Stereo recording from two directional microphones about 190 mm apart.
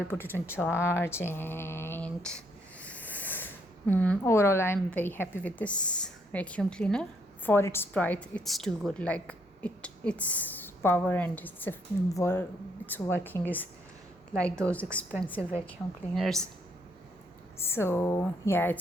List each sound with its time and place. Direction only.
0.1 s speech: 10° left (ahead or behind)
17.6 s speech: 10° left (ahead or behind)